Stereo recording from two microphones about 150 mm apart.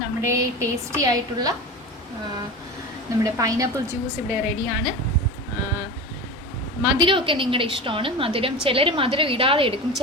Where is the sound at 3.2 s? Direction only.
20° right (ahead or behind).